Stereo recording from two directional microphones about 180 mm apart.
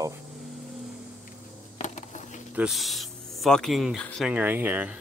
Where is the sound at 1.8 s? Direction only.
40° left (ahead or behind).